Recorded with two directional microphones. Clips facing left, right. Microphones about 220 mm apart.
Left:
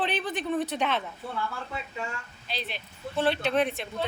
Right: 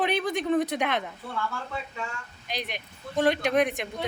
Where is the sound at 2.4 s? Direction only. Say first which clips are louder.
Right 2 dB; 15° right (ahead or behind).